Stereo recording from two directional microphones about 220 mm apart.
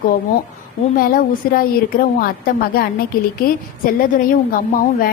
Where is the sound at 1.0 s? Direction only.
40° left (ahead or behind).